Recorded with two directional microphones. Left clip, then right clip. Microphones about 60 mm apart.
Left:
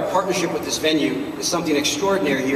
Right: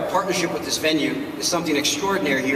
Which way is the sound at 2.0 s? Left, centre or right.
Right.